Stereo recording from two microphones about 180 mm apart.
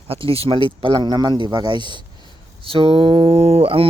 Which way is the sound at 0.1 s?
30° right (ahead or behind).